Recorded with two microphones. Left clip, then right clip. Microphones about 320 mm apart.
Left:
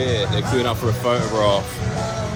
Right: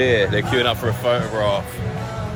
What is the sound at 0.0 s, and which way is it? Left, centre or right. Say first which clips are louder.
Music: right 5 dB; right.